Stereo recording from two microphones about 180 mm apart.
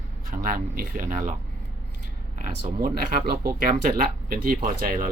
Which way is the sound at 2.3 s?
55° right (ahead or behind).